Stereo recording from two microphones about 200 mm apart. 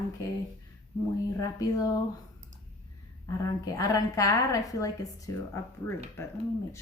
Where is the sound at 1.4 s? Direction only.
20° left (ahead or behind).